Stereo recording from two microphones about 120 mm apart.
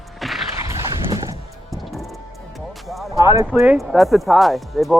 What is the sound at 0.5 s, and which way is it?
Horse, 25° right (ahead or behind).